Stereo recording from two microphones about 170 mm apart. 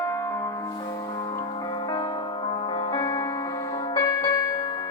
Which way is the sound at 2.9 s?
20° left (ahead or behind).